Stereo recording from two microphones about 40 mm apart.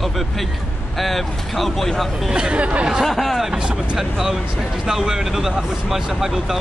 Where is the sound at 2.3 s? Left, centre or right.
Right.